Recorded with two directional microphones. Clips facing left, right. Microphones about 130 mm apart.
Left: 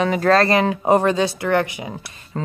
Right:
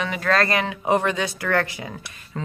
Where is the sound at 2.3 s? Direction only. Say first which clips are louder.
Left 4 dB; 40° left (ahead or behind).